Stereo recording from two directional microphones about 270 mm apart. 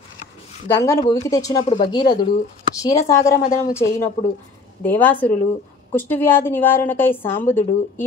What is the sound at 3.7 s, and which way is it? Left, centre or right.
A woman's voice, centre.